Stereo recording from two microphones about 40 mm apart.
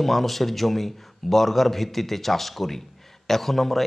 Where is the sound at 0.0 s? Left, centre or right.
Centre.